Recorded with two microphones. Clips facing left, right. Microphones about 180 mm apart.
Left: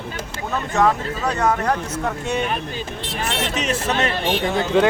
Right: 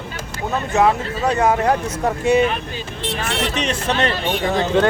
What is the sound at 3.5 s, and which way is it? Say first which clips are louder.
Speech: even; 5° left (ahead or behind).